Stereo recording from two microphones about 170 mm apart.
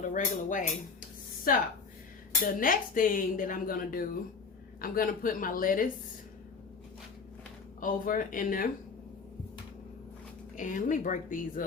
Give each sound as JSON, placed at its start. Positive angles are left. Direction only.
{"t": 0.0, "sound": "speech", "side_deg": 50}
{"t": 7.8, "sound": "speech", "side_deg": 55}
{"t": 10.6, "sound": "speech", "side_deg": 50}